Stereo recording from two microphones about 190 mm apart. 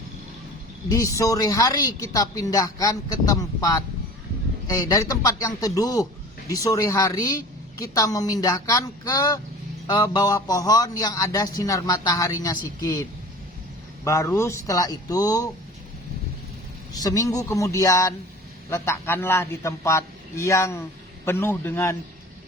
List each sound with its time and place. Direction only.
0.9 s a man's voice: 15° left (ahead or behind)
16.9 s a man's voice: 20° left (ahead or behind)